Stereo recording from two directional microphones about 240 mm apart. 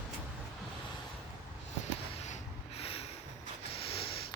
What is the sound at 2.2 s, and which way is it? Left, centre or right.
Snort, left.